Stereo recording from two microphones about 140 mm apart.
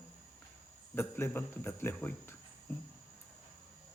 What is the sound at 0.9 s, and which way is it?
Speech, 15° left (ahead or behind).